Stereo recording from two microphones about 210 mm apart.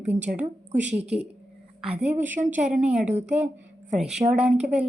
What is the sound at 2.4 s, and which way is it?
Speech, 35° right (ahead or behind).